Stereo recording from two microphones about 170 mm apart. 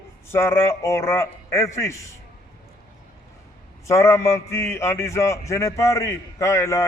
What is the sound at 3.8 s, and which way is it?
A man's voice, 15° left (ahead or behind).